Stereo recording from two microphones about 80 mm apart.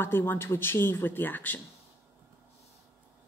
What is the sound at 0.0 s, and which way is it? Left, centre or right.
A woman's voice, left.